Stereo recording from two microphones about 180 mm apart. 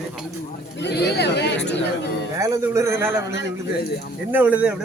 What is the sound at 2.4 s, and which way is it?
Speech, 15° right (ahead or behind).